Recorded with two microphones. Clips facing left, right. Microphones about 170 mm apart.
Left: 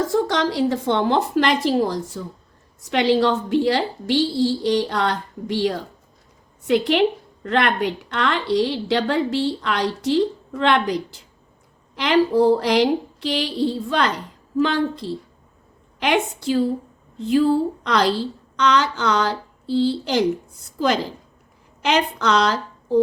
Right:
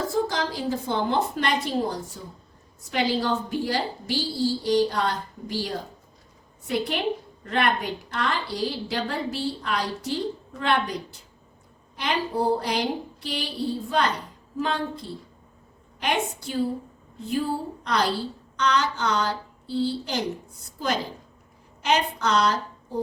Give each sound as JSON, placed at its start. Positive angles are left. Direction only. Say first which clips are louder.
{"t": 0.3, "sound": "a woman's voice", "louder": "left 7 dB", "side_deg": 85}
{"t": 2.9, "sound": "a woman's voice", "louder": "left 7 dB", "side_deg": 75}
{"t": 11.9, "sound": "a woman's voice", "louder": "left 9 dB", "side_deg": 85}